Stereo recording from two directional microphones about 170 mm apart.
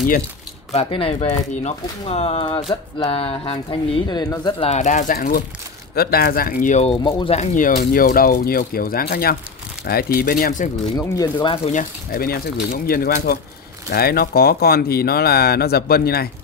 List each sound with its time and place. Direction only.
0.7 s speech: 35° left (ahead or behind)
4.6 s speech: 40° left (ahead or behind)
6.8 s speech: 30° left (ahead or behind); by 10.7 s 55° left (ahead or behind)
11.4 s speech: 30° left (ahead or behind)
11.7 s speech: 50° left (ahead or behind)